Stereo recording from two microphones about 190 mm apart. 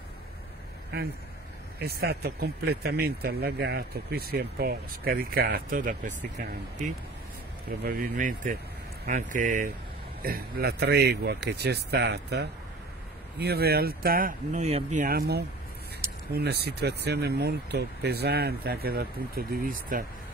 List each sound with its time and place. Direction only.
1.8 s speech: 55° right (ahead or behind)
7.8 s speech: 50° right (ahead or behind)